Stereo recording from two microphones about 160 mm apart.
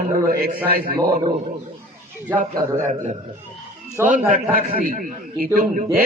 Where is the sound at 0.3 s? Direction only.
70° right (ahead or behind).